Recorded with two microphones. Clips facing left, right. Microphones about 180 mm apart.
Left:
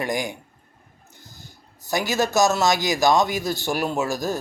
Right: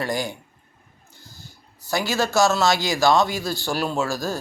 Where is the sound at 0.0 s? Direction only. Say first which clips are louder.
Even; 15° left (ahead or behind).